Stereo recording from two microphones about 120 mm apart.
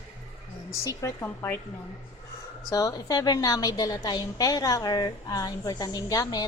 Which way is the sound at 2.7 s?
30° left (ahead or behind).